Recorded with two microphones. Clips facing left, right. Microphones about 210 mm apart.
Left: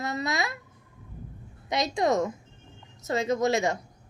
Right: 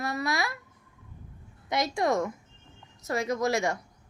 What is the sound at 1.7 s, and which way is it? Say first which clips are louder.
A woman's voice: left 2 dB; 20° left (ahead or behind).